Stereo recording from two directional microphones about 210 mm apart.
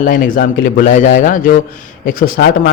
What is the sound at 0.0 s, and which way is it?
A man's voice, 40° left (ahead or behind).